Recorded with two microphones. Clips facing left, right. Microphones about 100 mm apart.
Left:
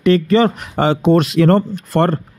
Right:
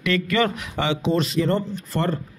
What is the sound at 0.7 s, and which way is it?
Speech, 50° left (ahead or behind).